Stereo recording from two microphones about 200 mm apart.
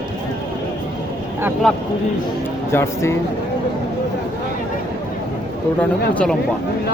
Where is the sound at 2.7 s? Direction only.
15° left (ahead or behind).